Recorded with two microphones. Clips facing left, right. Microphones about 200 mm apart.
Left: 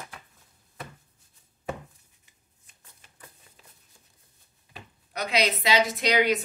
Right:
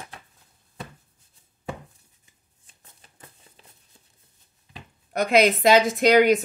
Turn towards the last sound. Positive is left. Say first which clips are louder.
# right 7 dB
turn(degrees=-45)  # may be behind; listen again after turning